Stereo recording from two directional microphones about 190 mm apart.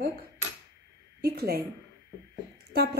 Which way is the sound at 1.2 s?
55° right (ahead or behind).